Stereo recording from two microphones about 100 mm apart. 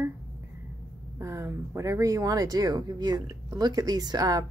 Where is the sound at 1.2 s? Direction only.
30° right (ahead or behind).